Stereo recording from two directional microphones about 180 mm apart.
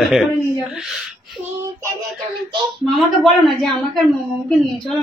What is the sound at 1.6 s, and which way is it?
Child singing, 15° right (ahead or behind).